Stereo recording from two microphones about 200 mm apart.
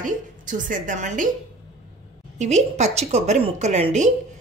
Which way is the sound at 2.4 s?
35° right (ahead or behind).